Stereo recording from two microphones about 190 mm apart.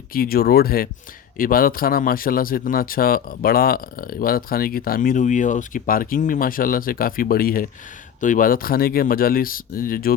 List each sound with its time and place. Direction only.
0.1 s speech: 50° left (ahead or behind)